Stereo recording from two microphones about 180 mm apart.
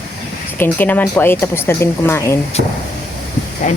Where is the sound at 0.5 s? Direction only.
10° left (ahead or behind).